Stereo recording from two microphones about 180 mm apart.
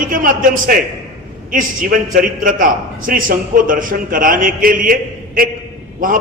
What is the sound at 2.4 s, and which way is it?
A man's voice, 50° right (ahead or behind).